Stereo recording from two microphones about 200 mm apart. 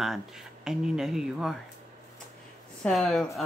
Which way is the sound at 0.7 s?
5° right (ahead or behind).